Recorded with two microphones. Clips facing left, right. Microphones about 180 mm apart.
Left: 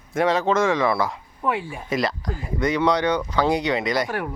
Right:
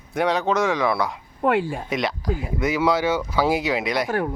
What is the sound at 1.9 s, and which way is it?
Speech, centre (ahead or behind).